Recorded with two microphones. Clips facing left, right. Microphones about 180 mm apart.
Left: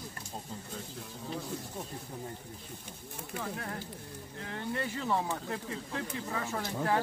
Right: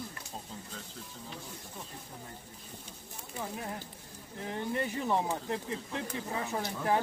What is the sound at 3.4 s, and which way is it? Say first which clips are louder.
Speech: even; 15° right (ahead or behind).